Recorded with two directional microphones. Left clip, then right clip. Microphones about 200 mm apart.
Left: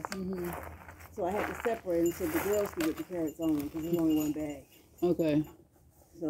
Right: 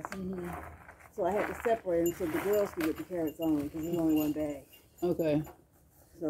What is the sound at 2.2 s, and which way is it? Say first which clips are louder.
Speech: right 1 dB; 60° left (ahead or behind).